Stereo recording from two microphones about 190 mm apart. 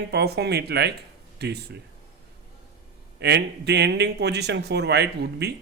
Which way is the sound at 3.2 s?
60° right (ahead or behind).